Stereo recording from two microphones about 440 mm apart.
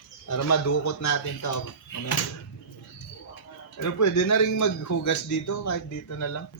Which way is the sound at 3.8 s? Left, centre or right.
Left.